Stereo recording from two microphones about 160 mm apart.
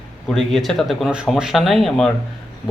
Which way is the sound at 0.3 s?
Centre (ahead or behind).